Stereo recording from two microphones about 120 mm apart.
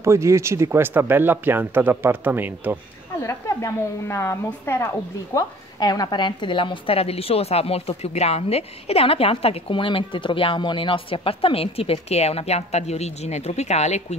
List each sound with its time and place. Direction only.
0.0 s speech: 25° right (ahead or behind)
3.2 s a woman's voice: 25° left (ahead or behind)
5.8 s a woman's voice: 35° left (ahead or behind); by 14.0 s 65° left (ahead or behind)